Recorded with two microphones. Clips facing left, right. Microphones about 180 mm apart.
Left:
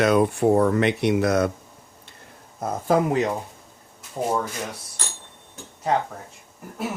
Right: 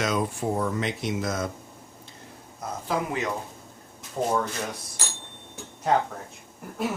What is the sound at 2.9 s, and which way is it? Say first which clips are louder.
Speech: left 8 dB; 45° left (ahead or behind).